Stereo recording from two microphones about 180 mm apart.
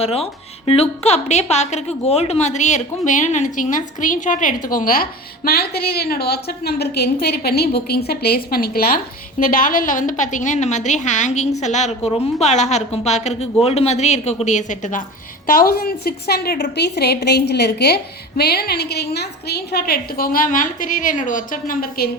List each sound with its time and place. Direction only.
0.0 s a woman's voice: 35° left (ahead or behind); by 22.1 s 55° left (ahead or behind)